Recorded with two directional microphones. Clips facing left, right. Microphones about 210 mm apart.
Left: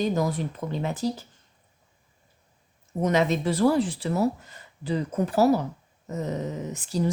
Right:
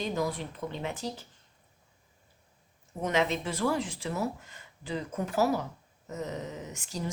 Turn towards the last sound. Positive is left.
turn(degrees=35)  # may be behind; listen again after turning